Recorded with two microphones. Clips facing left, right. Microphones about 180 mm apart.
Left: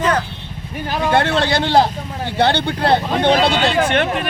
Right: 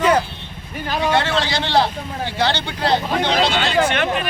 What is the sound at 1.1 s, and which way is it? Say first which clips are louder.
Speech: left 6 dB; 55° left (ahead or behind).